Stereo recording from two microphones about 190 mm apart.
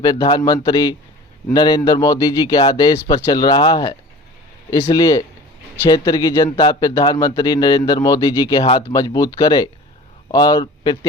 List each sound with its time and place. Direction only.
0.0 s speech: 20° left (ahead or behind)